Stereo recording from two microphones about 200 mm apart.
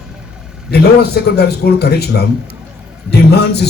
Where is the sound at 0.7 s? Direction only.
55° left (ahead or behind).